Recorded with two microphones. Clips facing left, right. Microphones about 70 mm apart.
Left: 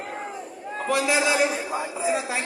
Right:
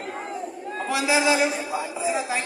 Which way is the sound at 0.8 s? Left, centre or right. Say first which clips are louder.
Right 1 dB; centre.